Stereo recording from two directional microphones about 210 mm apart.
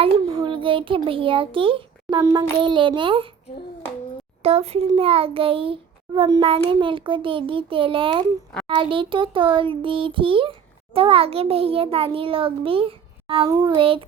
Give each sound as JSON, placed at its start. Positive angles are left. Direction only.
{"t": 0.0, "sound": "a child's voice", "side_deg": -25}
{"t": 4.4, "sound": "a child's voice", "side_deg": -30}